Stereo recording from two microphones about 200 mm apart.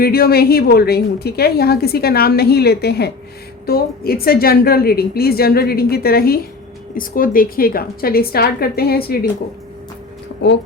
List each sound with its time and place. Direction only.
0.0 s a woman's voice: 50° left (ahead or behind)